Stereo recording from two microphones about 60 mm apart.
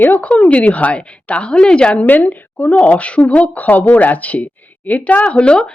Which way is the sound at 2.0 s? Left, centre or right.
Left.